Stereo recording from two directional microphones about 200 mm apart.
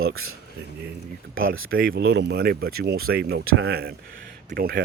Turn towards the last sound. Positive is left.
turn(degrees=-50)  # may be behind; listen again after turning